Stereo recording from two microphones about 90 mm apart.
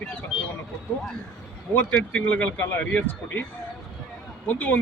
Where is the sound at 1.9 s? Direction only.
10° left (ahead or behind).